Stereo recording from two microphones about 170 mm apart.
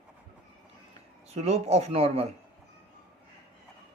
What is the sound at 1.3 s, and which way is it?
Speech, 40° right (ahead or behind).